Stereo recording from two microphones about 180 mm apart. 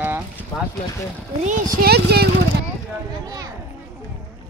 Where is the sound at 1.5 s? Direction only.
60° right (ahead or behind).